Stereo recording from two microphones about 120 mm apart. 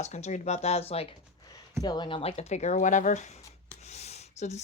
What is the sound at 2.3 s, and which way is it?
Speech, 65° left (ahead or behind).